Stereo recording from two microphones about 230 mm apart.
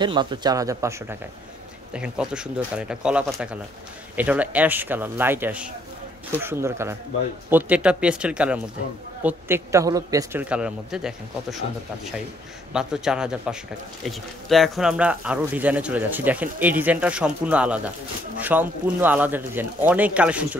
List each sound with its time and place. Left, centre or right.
0.0 s a man's voice: centre